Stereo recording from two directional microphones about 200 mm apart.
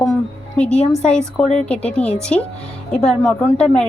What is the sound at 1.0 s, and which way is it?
Speech, 5° left (ahead or behind).